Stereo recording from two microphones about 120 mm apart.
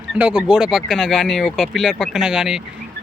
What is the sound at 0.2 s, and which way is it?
Speech, 10° right (ahead or behind).